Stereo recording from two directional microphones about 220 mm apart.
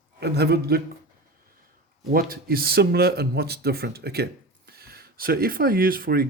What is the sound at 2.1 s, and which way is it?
Speech, 40° right (ahead or behind).